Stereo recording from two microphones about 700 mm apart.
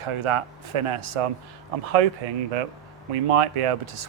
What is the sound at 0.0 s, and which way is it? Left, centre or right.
Speech, right.